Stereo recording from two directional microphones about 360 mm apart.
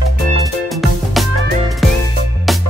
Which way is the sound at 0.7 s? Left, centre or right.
Centre.